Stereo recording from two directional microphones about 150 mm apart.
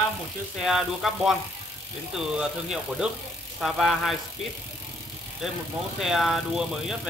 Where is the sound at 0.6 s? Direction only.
Centre (ahead or behind).